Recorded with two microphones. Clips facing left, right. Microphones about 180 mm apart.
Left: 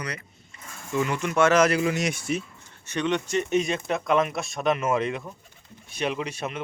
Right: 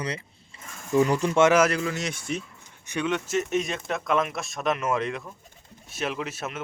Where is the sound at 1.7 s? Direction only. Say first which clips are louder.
Left 4 dB; 15° left (ahead or behind).